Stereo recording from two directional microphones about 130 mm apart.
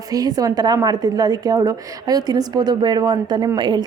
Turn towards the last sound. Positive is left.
turn(degrees=-35)  # may be behind; listen again after turning